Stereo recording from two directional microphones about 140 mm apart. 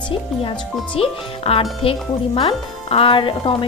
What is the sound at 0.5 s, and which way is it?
Speech, 40° left (ahead or behind).